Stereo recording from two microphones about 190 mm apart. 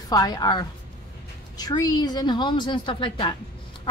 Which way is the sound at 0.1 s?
20° left (ahead or behind).